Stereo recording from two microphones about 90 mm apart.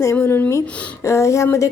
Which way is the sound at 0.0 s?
30° left (ahead or behind).